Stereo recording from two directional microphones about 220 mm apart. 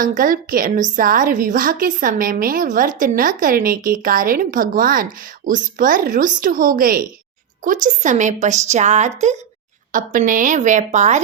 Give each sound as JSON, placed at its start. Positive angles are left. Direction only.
{"t": 0.0, "sound": "a woman's voice", "side_deg": -40}